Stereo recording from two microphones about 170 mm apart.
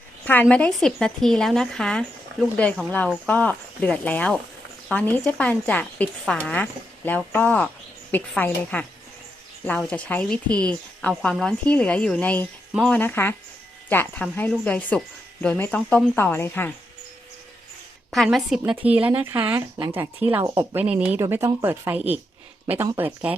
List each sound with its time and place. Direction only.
0.3 s a woman's voice: 10° left (ahead or behind)
18.1 s speech: centre (ahead or behind)